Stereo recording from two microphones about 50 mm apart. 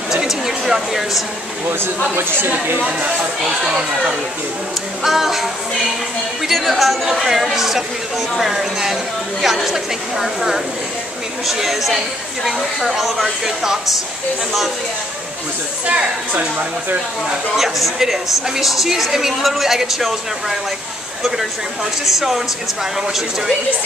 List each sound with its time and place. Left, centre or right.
0.1 s a sound: centre
2.1 s speech: right
5.0 s a woman's voice: centre
16.3 s speech: right
17.6 s a woman's voice: centre
22.9 s a woman's voice: centre